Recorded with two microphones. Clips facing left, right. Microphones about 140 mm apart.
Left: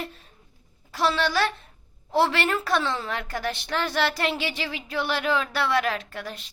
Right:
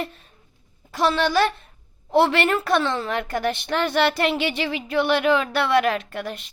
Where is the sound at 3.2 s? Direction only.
60° right (ahead or behind).